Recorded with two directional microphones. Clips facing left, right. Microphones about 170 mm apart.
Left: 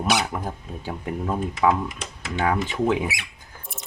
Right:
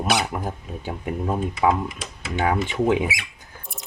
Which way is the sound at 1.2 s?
20° right (ahead or behind).